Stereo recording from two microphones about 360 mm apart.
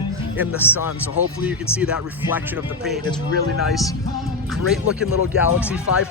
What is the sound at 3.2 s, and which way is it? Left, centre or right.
Speech, right.